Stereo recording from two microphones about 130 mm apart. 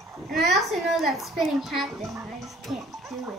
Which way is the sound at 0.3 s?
Centre (ahead or behind).